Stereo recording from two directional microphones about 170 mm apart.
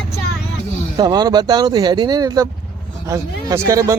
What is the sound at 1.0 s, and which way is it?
Speech, 25° right (ahead or behind).